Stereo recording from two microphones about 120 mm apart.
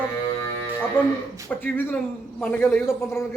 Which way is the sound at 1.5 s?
15° left (ahead or behind).